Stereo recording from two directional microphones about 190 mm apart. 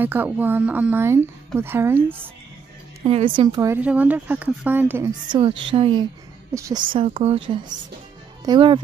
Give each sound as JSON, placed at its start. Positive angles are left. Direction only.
{"t": 0.0, "sound": "speech", "side_deg": -10}
{"t": 3.0, "sound": "speech", "side_deg": -30}
{"t": 3.5, "sound": "speech", "side_deg": -15}
{"t": 5.7, "sound": "speech", "side_deg": -25}
{"t": 6.9, "sound": "speech", "side_deg": -25}